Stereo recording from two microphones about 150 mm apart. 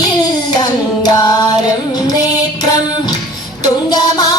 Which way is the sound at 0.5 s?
25° left (ahead or behind).